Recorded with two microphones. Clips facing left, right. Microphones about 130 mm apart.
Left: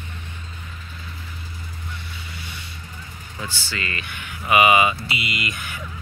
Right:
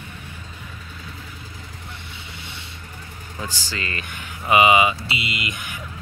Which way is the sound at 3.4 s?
35° right (ahead or behind).